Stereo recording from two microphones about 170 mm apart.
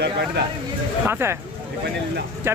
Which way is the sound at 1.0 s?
15° right (ahead or behind).